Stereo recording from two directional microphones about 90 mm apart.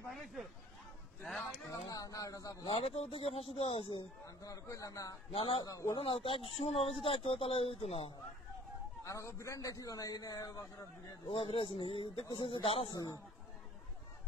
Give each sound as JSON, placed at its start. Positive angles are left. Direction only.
{"t": 0.1, "sound": "speech", "side_deg": 0}
{"t": 1.7, "sound": "a man's voice", "side_deg": 40}
{"t": 2.6, "sound": "speech", "side_deg": 90}
{"t": 4.4, "sound": "a man's voice", "side_deg": 40}
{"t": 5.3, "sound": "speech", "side_deg": 85}
{"t": 5.6, "sound": "a man's voice", "side_deg": 35}
{"t": 5.9, "sound": "speech", "side_deg": 75}
{"t": 6.5, "sound": "speech", "side_deg": 90}
{"t": 9.0, "sound": "a man's voice", "side_deg": 35}
{"t": 11.2, "sound": "speech", "side_deg": 85}
{"t": 12.9, "sound": "a man's voice", "side_deg": 45}